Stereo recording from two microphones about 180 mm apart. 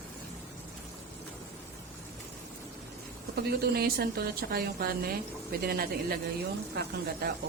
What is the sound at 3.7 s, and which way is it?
Speech, 60° right (ahead or behind).